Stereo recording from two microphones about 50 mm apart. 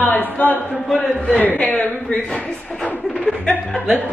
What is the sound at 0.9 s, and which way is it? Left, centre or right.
Speech, centre.